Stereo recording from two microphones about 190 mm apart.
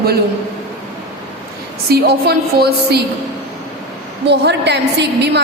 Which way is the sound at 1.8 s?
55° right (ahead or behind).